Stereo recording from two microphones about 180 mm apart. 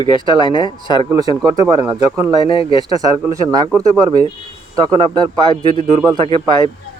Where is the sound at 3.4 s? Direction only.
20° right (ahead or behind).